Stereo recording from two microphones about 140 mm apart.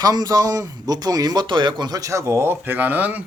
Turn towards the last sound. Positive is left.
turn(degrees=-10)  # may be behind; listen again after turning